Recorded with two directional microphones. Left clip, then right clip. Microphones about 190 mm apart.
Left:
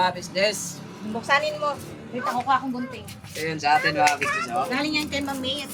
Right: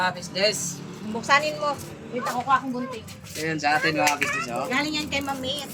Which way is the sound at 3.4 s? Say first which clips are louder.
Left 2 dB; 20° right (ahead or behind).